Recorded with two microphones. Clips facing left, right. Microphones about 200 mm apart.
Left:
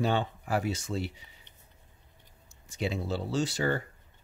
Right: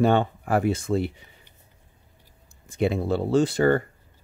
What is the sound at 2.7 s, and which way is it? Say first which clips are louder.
Speech: right 8 dB; 55° right (ahead or behind).